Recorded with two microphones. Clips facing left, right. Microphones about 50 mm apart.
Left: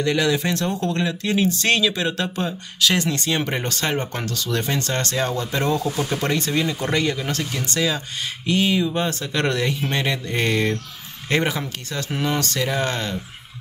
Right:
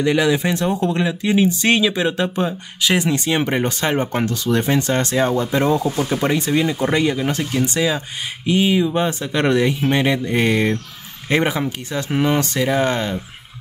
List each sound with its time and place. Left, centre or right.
0.0 s speech: centre